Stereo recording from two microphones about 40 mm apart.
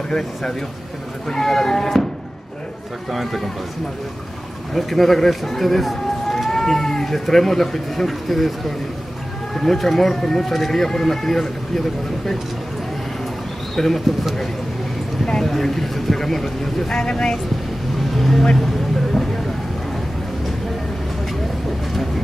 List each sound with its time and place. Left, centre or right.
0.2 s speech: centre
3.1 s speech: centre
4.7 s speech: centre
13.7 s speech: centre
15.2 s speech: centre
16.9 s speech: centre
18.1 s vehicle: centre